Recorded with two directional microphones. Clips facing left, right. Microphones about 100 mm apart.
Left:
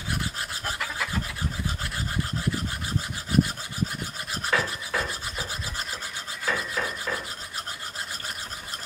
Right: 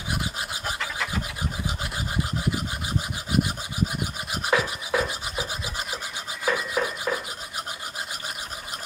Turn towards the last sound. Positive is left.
turn(degrees=-15)  # may be behind; listen again after turning